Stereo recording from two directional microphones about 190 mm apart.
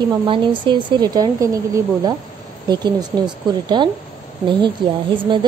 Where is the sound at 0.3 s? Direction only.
25° right (ahead or behind).